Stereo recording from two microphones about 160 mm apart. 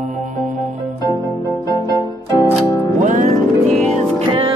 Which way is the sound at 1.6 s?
20° right (ahead or behind).